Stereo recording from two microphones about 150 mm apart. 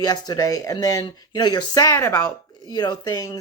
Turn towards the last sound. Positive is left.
turn(degrees=25)  # may be behind; listen again after turning